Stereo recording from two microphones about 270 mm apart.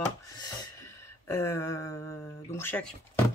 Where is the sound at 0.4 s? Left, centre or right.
Centre.